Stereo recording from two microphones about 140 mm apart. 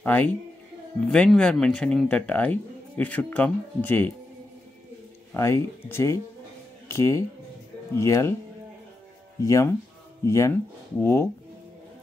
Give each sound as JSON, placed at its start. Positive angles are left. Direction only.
{"t": 0.0, "sound": "speech", "side_deg": 15}
{"t": 5.3, "sound": "speech", "side_deg": 20}
{"t": 9.4, "sound": "speech", "side_deg": 20}